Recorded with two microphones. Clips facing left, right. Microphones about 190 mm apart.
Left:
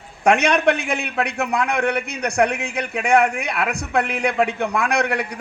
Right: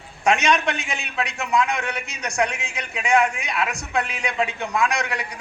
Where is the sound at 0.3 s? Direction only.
60° left (ahead or behind).